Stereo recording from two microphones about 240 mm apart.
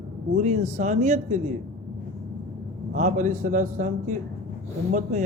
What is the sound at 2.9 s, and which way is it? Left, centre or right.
A man's voice, right.